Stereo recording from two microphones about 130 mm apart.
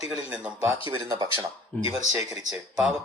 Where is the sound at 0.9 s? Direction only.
30° right (ahead or behind).